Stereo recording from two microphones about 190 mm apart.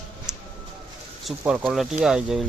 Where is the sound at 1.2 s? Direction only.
Centre (ahead or behind).